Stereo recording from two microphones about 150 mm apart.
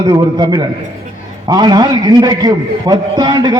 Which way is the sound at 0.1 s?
30° right (ahead or behind).